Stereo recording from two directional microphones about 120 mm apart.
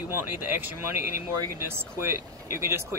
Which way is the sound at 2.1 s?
20° right (ahead or behind).